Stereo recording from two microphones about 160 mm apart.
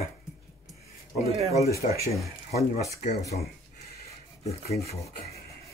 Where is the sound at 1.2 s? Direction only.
40° right (ahead or behind).